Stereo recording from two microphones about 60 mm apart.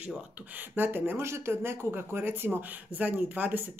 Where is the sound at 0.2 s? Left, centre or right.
Right.